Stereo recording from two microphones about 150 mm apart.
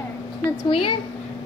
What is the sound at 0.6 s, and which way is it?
Speech, 35° left (ahead or behind).